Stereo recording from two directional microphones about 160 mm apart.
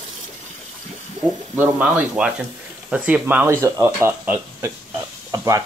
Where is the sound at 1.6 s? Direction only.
10° right (ahead or behind).